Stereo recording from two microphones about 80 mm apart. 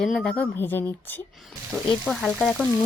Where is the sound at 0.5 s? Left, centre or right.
Left.